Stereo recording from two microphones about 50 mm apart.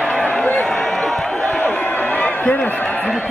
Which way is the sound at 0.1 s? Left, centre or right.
Left.